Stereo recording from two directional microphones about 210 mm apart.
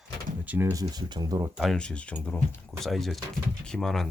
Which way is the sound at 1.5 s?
Centre (ahead or behind).